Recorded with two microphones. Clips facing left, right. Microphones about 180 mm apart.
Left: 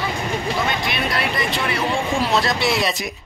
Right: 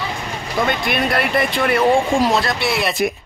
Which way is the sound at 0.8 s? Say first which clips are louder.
Right 4 dB; 55° right (ahead or behind).